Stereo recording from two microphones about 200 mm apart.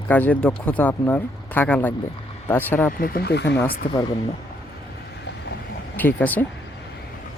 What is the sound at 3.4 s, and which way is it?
Speech, 10° left (ahead or behind).